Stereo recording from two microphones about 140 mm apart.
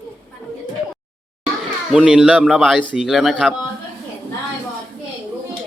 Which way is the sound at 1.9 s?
5° right (ahead or behind).